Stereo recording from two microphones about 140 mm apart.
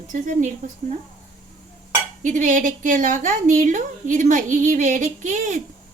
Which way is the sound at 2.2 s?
65° right (ahead or behind).